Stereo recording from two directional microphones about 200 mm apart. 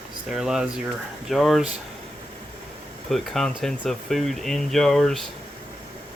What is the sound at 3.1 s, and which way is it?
Speech, centre (ahead or behind).